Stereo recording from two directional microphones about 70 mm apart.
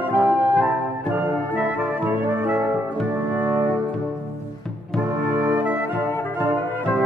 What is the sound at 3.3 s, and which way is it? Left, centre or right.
Brass instrument, right.